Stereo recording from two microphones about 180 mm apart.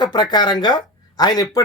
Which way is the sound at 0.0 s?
25° left (ahead or behind).